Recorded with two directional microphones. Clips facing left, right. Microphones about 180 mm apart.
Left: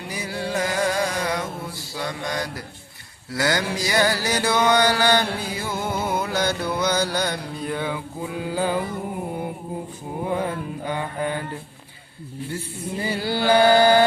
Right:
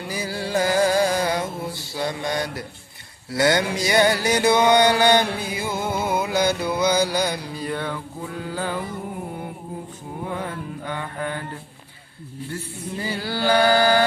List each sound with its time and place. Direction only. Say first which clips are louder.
0.1 s music: right 2 dB; 35° right (ahead or behind)
1.9 s a sound: right 3 dB; 25° right (ahead or behind)
3.3 s mantra: right 3 dB; 25° right (ahead or behind); by 8.8 s 10° left (ahead or behind)
10.2 s mantra: left 4 dB; 15° left (ahead or behind)
13.2 s chant: left 2 dB; 25° left (ahead or behind)